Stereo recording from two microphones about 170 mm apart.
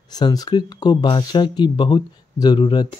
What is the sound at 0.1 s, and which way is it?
Speech, 25° left (ahead or behind).